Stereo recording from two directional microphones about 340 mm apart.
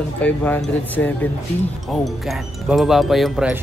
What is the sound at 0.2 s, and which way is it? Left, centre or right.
Speech, centre.